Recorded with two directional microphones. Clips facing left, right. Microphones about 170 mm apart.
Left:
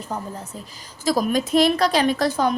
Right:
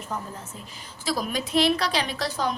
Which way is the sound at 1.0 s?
45° left (ahead or behind).